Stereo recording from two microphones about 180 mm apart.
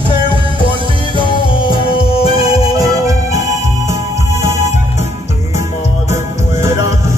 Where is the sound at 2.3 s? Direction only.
20° right (ahead or behind).